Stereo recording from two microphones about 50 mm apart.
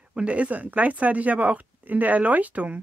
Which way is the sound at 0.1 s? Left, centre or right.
Right.